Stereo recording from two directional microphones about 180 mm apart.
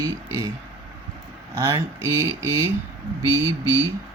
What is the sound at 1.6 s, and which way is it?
Speech, 20° right (ahead or behind).